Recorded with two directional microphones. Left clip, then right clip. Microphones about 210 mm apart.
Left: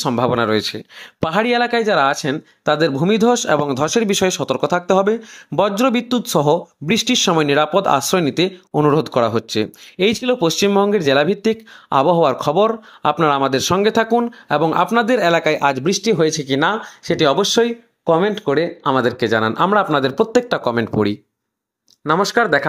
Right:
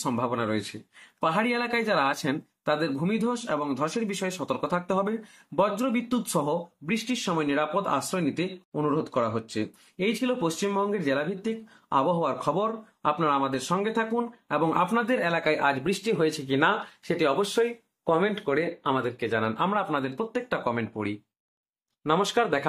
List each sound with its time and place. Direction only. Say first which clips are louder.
0.1 s speech: left 12 dB; 45° left (ahead or behind)
1.2 s speech: left 9 dB; 40° left (ahead or behind)
22.0 s speech: left 8 dB; 25° left (ahead or behind)